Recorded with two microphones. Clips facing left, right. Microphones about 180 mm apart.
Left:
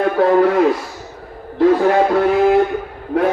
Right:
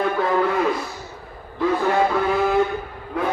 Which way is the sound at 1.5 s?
65° left (ahead or behind).